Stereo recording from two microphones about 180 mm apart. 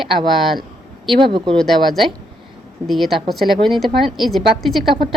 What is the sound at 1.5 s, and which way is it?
A woman's voice, centre (ahead or behind).